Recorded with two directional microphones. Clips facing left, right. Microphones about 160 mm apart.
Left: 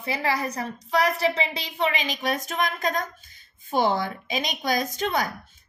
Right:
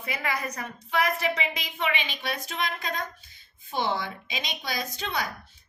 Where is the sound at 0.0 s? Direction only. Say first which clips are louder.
Left 5 dB; 30° left (ahead or behind).